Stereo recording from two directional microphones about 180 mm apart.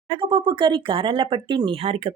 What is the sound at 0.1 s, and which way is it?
Speech, 25° right (ahead or behind).